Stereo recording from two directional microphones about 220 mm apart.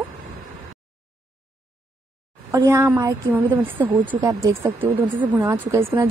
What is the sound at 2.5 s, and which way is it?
A woman's voice, 10° right (ahead or behind).